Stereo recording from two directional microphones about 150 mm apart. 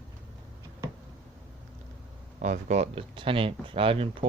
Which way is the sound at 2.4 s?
55° right (ahead or behind).